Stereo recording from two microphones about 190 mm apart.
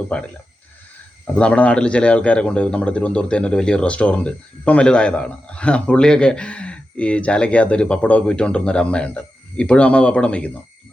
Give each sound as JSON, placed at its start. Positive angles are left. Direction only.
{"t": 0.1, "sound": "speech", "side_deg": 5}
{"t": 1.4, "sound": "speech", "side_deg": 5}